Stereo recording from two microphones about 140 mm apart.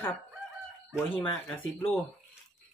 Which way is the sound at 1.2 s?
15° left (ahead or behind).